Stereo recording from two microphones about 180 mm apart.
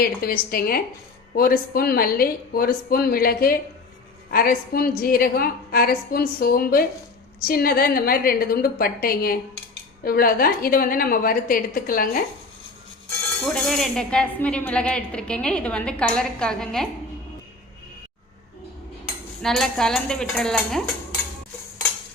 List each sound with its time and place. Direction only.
0.0 s a woman's voice: 55° left (ahead or behind)
13.4 s speech: 5° left (ahead or behind)
19.4 s speech: centre (ahead or behind)